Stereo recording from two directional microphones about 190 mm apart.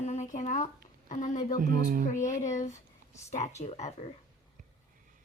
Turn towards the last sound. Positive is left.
turn(degrees=35)  # may be behind; listen again after turning